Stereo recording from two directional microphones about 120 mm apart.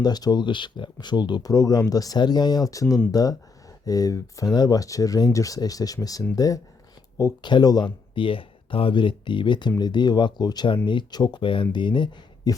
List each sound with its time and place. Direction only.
0.0 s speech: 35° left (ahead or behind)